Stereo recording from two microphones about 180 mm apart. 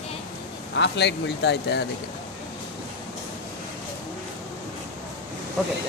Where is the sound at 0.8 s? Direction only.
70° left (ahead or behind).